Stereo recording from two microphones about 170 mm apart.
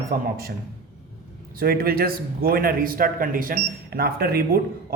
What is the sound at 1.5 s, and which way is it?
Speech, 60° right (ahead or behind).